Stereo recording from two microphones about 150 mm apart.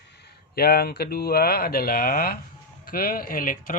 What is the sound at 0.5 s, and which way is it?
Speech, 90° left.